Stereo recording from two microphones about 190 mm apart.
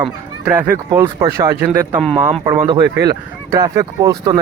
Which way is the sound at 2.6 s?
25° right (ahead or behind).